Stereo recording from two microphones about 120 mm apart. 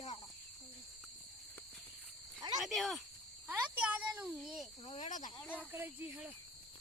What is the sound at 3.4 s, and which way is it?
Cricket, 15° right (ahead or behind).